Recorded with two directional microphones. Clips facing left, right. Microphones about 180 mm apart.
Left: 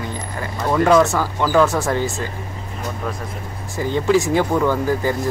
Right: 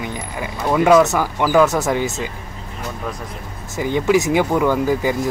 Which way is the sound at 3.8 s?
15° right (ahead or behind).